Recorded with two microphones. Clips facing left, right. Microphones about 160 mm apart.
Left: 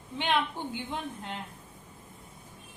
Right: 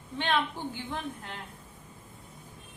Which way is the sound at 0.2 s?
15° left (ahead or behind).